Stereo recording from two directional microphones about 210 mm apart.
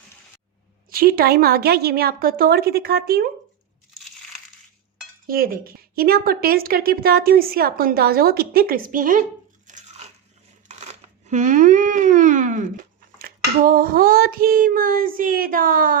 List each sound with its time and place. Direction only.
0.9 s a woman's voice: 45° right (ahead or behind)
5.2 s a woman's voice: 45° right (ahead or behind)
9.6 s crunch: 35° right (ahead or behind)
10.7 s speech: 35° right (ahead or behind)